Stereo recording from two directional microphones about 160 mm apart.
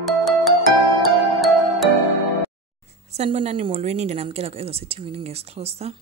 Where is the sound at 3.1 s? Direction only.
40° right (ahead or behind).